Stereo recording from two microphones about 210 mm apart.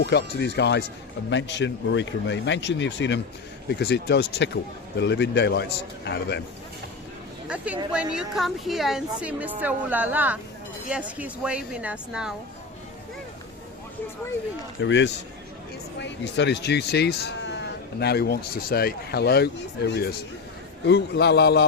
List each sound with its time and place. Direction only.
0.0 s speech: 55° left (ahead or behind)
7.4 s a sound: 5° right (ahead or behind)
7.9 s a woman's voice: 5° right (ahead or behind)
14.8 s speech: 60° left (ahead or behind)